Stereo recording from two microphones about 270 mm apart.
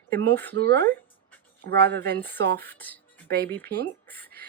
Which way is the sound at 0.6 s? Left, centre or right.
Right.